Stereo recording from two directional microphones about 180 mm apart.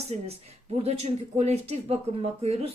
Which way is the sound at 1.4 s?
35° right (ahead or behind).